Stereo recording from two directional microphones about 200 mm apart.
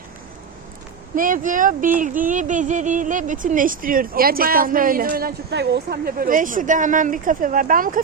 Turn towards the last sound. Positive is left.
turn(degrees=-45)  # may be behind; listen again after turning